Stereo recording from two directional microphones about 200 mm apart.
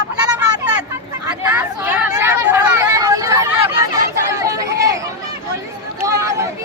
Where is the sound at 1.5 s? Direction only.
10° right (ahead or behind).